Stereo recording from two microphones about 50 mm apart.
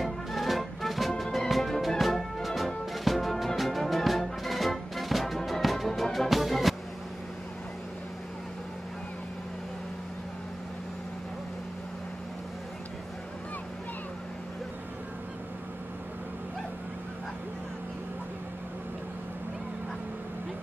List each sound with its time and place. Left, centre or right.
0.0 s music: centre